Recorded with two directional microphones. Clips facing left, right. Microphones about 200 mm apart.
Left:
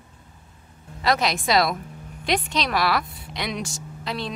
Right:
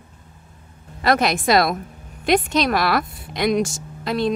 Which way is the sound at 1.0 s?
55° right (ahead or behind).